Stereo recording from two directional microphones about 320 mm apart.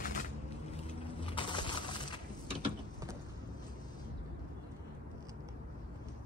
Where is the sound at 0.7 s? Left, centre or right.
Centre.